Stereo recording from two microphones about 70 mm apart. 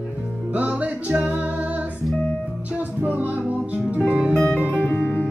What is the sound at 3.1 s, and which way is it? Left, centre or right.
Music, right.